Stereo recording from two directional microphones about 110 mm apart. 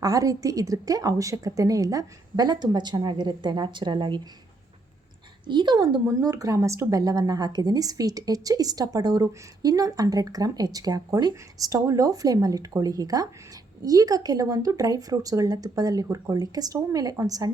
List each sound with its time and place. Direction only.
0.0 s a woman's voice: 30° right (ahead or behind)
5.5 s a woman's voice: 45° right (ahead or behind)
6.1 s a woman's voice: 30° right (ahead or behind)